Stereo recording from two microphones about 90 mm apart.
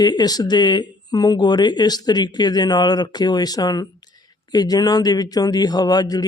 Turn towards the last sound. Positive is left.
turn(degrees=50)  # may be behind; listen again after turning